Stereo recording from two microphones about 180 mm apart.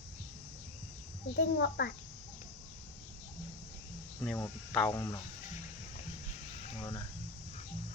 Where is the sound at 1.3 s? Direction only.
60° left (ahead or behind).